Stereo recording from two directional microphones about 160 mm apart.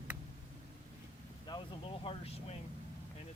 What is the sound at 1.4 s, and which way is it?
Speech, 30° left (ahead or behind).